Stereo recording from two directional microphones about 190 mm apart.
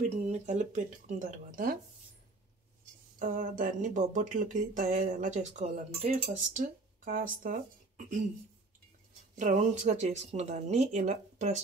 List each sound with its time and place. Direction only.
0.3 s speech: 40° right (ahead or behind)
3.2 s speech: 45° right (ahead or behind)
9.3 s speech: 40° right (ahead or behind)